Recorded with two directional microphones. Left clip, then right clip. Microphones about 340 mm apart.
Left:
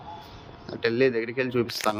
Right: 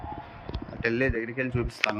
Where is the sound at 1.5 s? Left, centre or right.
Centre.